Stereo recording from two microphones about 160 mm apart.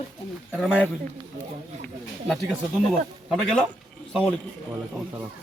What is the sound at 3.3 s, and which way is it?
Speech, centre (ahead or behind).